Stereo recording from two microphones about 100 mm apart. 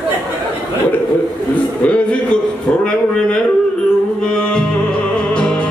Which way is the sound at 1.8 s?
10° left (ahead or behind).